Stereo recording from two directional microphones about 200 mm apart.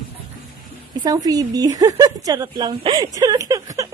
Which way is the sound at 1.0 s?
20° right (ahead or behind).